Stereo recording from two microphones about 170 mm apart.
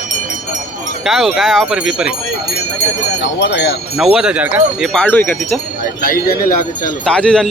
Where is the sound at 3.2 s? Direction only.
90° left.